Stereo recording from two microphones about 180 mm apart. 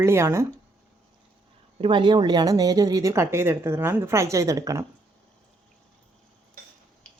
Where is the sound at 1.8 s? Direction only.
25° right (ahead or behind).